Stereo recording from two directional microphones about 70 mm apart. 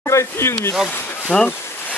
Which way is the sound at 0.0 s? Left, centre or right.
Left.